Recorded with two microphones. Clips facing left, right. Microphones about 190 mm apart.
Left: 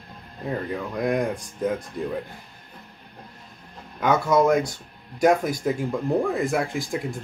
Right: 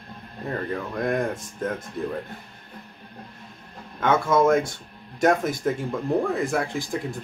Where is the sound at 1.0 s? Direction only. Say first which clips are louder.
Left 1 dB; 10° left (ahead or behind).